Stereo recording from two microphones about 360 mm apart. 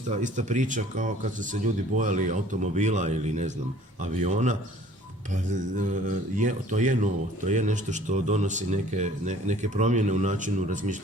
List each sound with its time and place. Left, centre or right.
0.1 s speech: centre